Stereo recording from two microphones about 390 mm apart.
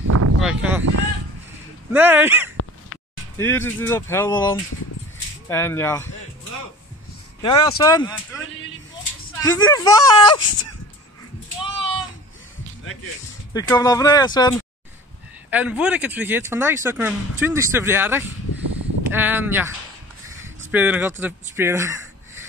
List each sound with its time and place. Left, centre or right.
0.1 s a sound: right
0.4 s speech: centre
1.9 s speech: centre
3.3 s speech: centre
7.4 s speech: centre
9.4 s speech: centre
11.6 s a sound: centre
13.5 s speech: centre
15.5 s speech: centre